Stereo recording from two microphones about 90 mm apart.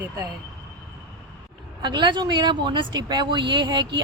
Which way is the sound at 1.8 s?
60° right (ahead or behind).